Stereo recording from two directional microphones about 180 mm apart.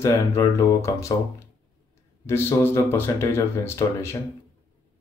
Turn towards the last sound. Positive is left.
turn(degrees=15)  # may be behind; listen again after turning